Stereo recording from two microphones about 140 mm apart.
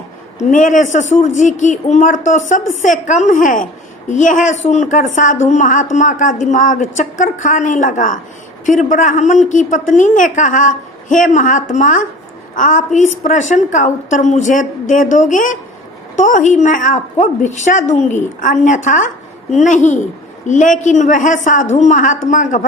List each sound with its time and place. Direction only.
0.5 s speech: 65° left (ahead or behind)